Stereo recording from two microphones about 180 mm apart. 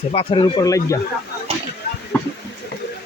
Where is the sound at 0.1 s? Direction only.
30° left (ahead or behind).